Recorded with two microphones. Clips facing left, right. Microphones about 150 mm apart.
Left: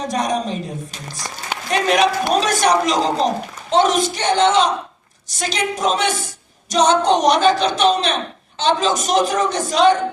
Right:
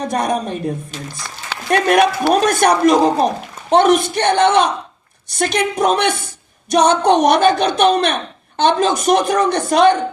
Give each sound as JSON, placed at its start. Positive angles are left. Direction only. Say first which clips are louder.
{"t": 0.1, "sound": "a woman's voice", "louder": "right 1 dB", "side_deg": -55}
{"t": 1.7, "sound": "a woman's voice", "louder": "right 3 dB", "side_deg": -55}